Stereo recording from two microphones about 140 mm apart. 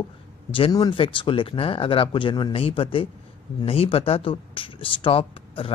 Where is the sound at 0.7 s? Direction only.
25° left (ahead or behind).